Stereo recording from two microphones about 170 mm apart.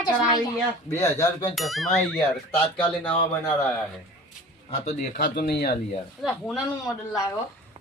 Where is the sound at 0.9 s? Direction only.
15° left (ahead or behind).